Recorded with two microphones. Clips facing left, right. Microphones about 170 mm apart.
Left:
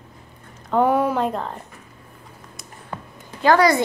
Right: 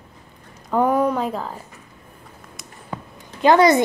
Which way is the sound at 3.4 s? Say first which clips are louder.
Right 2 dB; 20° right (ahead or behind).